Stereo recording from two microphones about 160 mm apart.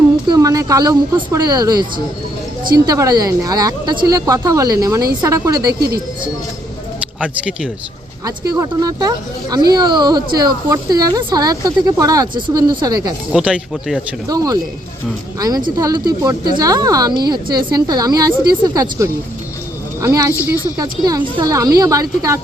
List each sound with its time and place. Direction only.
0.3 s a woman's voice: 20° right (ahead or behind)
7.2 s speech: 10° right (ahead or behind)
8.2 s a woman's voice: 20° right (ahead or behind)
13.3 s speech: 5° right (ahead or behind)
14.3 s a woman's voice: 25° right (ahead or behind)